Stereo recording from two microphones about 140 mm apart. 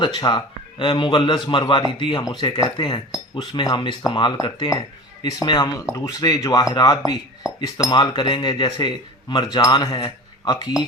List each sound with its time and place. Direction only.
0.2 s a man's voice: 35° left (ahead or behind)